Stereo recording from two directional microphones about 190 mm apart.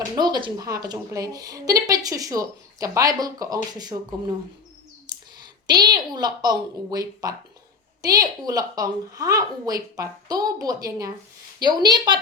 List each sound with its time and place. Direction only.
0.2 s a woman's voice: 25° right (ahead or behind)
5.6 s a woman's voice: 20° right (ahead or behind)